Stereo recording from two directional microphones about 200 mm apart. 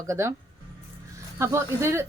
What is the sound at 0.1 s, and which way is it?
Speech, 15° right (ahead or behind).